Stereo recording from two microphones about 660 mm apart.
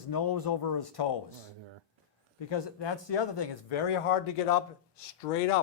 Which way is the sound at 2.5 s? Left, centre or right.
Left.